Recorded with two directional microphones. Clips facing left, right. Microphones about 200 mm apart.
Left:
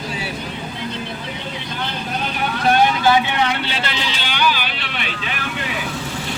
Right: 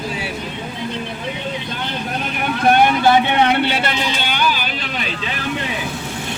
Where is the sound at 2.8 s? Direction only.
55° right (ahead or behind).